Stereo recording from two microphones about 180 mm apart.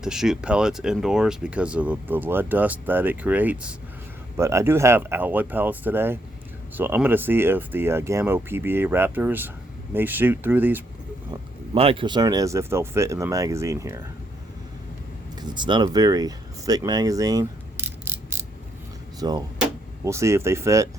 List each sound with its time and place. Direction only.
0.0 s speech: 5° right (ahead or behind)
11.7 s speech: 30° right (ahead or behind)
15.4 s speech: 25° right (ahead or behind)